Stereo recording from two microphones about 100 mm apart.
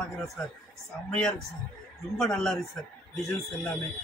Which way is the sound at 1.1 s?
10° left (ahead or behind).